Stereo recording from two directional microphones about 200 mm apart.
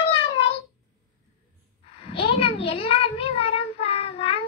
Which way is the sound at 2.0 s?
25° left (ahead or behind).